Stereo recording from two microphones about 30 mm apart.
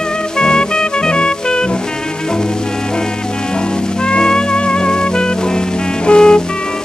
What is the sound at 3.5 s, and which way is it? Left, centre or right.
Music, left.